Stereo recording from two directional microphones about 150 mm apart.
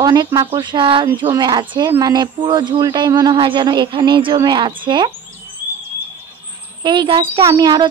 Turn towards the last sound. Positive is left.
turn(degrees=-30)  # may be behind; listen again after turning